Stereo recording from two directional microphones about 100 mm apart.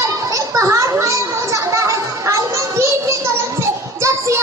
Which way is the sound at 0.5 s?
30° right (ahead or behind).